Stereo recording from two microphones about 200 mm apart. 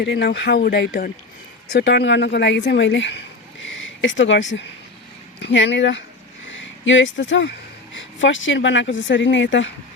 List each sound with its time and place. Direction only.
0.0 s speech: 55° left (ahead or behind)
1.7 s a woman's voice: 60° left (ahead or behind)